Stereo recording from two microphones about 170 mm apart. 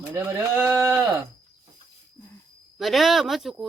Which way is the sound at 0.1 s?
15° right (ahead or behind).